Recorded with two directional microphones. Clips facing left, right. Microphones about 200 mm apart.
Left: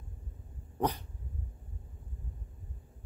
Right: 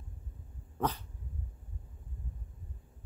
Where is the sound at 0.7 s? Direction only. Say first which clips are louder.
Left 2 dB; 15° left (ahead or behind).